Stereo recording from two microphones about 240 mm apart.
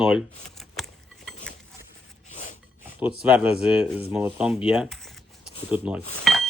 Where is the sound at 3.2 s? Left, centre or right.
Centre.